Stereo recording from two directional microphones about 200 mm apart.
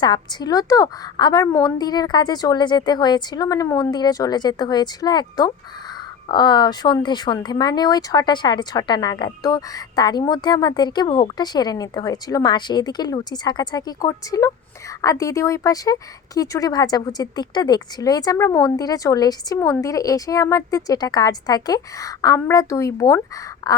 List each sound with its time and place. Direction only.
0.0 s speech: 20° left (ahead or behind)